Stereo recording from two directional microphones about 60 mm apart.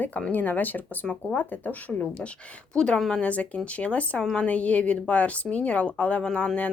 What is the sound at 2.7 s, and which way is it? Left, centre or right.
Speech, centre.